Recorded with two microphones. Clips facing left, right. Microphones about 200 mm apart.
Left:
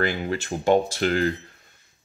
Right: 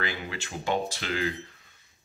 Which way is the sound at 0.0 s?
50° left (ahead or behind).